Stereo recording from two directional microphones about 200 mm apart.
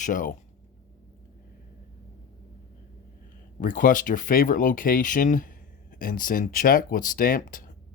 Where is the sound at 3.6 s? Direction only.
40° left (ahead or behind).